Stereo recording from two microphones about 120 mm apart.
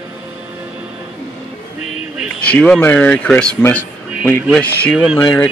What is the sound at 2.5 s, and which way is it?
Speech, 10° left (ahead or behind).